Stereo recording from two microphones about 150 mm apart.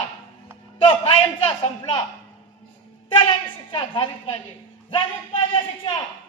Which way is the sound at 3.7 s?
30° left (ahead or behind).